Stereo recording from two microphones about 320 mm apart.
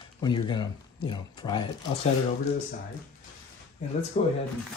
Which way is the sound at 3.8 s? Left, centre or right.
Left.